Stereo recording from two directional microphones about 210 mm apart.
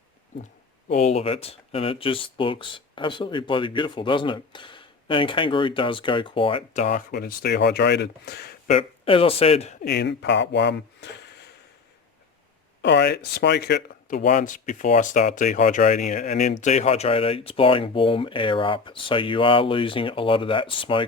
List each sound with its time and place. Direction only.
0.9 s speech: 30° left (ahead or behind)
7.1 s speech: 50° left (ahead or behind)
8.7 s speech: 25° left (ahead or behind)
9.8 s speech: 55° left (ahead or behind)
12.8 s speech: 55° left (ahead or behind)
14.3 s speech: 35° left (ahead or behind)